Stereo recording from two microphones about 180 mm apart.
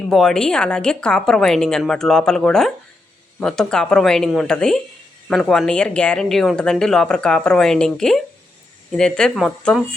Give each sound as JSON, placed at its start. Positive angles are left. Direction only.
{"t": 0.1, "sound": "speech", "side_deg": 0}